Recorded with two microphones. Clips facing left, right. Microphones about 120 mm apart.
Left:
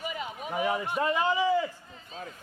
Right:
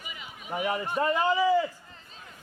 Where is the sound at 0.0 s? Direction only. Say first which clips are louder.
Left 9 dB; 40° left (ahead or behind).